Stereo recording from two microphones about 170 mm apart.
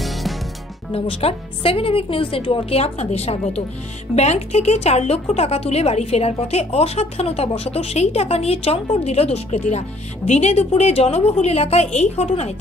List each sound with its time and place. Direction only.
0.0 s music: centre (ahead or behind)
0.9 s speech: 35° left (ahead or behind)